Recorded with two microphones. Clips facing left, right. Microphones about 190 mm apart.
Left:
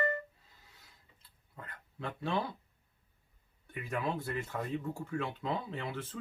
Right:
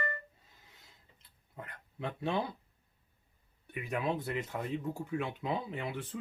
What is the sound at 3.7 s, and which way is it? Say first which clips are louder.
Speech: right 2 dB; 15° right (ahead or behind).